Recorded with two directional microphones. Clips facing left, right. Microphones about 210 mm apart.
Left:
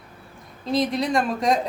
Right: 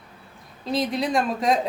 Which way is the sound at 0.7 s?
Centre (ahead or behind).